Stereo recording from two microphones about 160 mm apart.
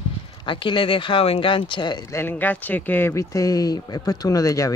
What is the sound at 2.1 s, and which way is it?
Speech, 10° left (ahead or behind).